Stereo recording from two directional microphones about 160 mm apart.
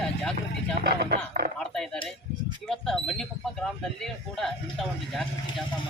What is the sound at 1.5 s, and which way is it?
Cutlery, 5° left (ahead or behind).